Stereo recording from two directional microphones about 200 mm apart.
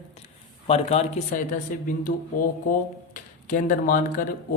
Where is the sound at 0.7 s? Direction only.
30° left (ahead or behind).